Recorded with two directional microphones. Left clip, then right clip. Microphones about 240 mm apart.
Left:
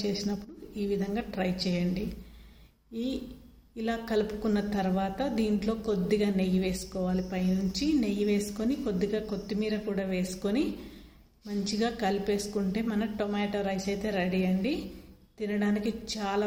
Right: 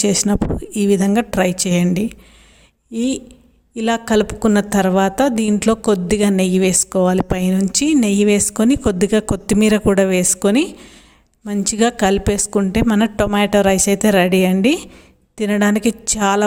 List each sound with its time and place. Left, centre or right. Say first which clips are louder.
0.0 s a woman's voice: right 16 dB; right